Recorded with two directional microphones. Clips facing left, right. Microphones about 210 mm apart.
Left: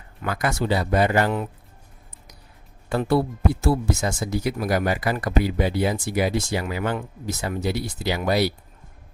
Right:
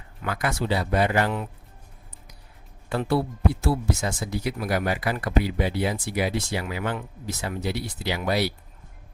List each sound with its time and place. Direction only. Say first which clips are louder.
0.3 s speech: left 3 dB; 40° left (ahead or behind)
3.6 s speech: left 3 dB; 45° left (ahead or behind)